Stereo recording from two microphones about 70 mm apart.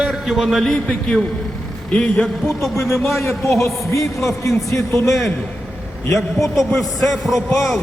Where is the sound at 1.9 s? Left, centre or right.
Centre.